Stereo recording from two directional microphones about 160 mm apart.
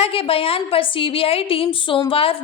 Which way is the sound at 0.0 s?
35° left (ahead or behind).